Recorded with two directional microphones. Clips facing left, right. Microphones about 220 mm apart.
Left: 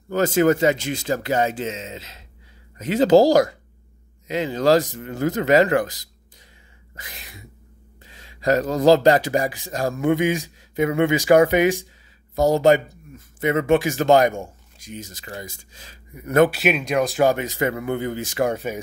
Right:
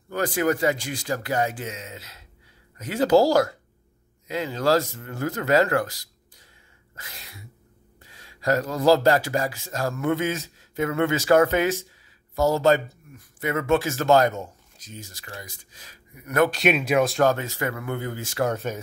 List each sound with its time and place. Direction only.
0.1 s speech: 25° left (ahead or behind)
7.0 s sneeze: 20° left (ahead or behind)
8.0 s speech: 20° left (ahead or behind)
16.4 s speech: 5° left (ahead or behind)
17.2 s speech: 15° left (ahead or behind)